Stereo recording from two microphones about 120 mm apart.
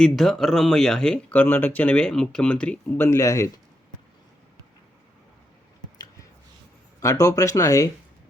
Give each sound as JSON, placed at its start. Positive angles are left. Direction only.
{"t": 0.0, "sound": "speech", "side_deg": 0}
{"t": 3.1, "sound": "speech", "side_deg": 25}
{"t": 7.0, "sound": "speech", "side_deg": 25}